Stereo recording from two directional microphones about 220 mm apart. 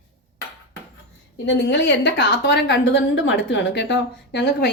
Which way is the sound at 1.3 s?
50° left (ahead or behind).